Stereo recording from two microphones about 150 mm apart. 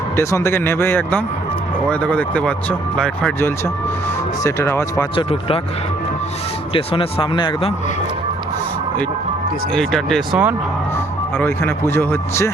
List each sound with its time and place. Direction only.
0.2 s speech: 20° left (ahead or behind)
4.4 s speech: 20° left (ahead or behind)
5.1 s speech: 40° left (ahead or behind)
6.7 s speech: 35° left (ahead or behind)
9.7 s speech: 5° left (ahead or behind)
11.3 s speech: 15° left (ahead or behind)